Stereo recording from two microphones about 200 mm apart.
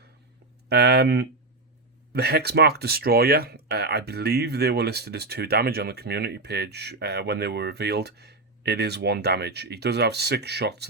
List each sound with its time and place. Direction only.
0.7 s speech: 55° right (ahead or behind)